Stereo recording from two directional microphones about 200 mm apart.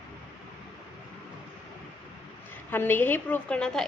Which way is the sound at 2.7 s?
10° left (ahead or behind).